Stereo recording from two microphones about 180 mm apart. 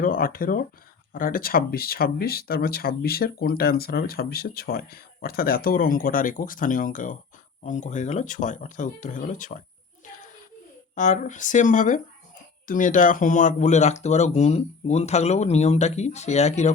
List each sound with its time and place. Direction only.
0.0 s speech: 50° left (ahead or behind)
10.9 s speech: 45° left (ahead or behind)